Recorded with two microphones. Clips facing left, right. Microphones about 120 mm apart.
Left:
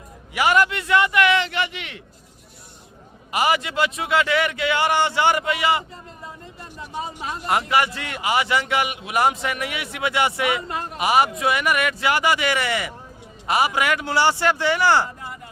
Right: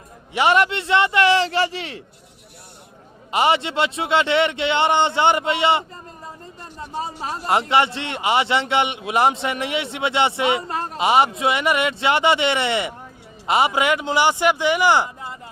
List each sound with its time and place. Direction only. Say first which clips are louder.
0.3 s a man's voice: right 2 dB; 25° right (ahead or behind)
3.3 s a man's voice: right 2 dB; 25° right (ahead or behind)
7.4 s a man's voice: right 2 dB; 25° right (ahead or behind)